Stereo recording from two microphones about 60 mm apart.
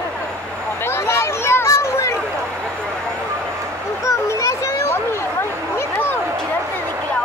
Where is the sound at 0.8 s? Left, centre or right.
Left.